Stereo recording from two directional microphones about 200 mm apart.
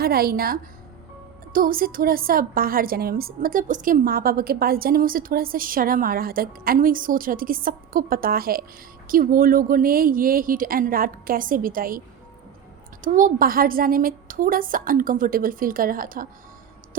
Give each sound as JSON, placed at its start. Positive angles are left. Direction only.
{"t": 0.0, "sound": "a woman's voice", "side_deg": -50}